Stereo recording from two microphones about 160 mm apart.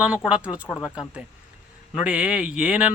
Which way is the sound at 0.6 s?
10° left (ahead or behind).